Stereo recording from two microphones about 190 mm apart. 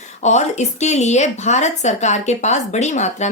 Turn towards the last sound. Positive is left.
turn(degrees=40)  # may be behind; listen again after turning